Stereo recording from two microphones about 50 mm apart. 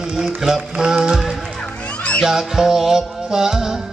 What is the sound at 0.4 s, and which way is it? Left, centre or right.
Music, centre.